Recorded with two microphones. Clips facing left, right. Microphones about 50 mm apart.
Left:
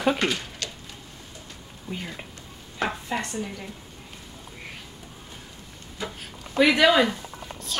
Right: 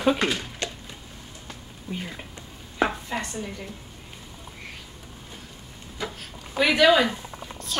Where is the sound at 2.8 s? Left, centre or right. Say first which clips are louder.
Right 4 dB; centre.